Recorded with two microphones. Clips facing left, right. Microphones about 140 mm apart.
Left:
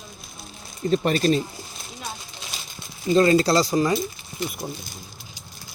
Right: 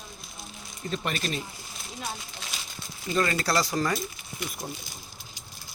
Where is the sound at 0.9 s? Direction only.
35° left (ahead or behind).